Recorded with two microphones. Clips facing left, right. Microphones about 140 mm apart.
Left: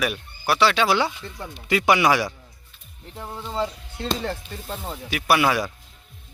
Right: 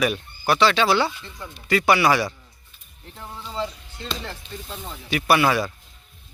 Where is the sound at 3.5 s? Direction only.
40° left (ahead or behind).